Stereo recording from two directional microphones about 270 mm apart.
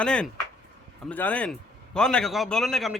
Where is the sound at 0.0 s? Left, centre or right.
Centre.